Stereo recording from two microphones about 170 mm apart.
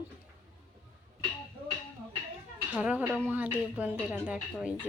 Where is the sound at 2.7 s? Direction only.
10° right (ahead or behind).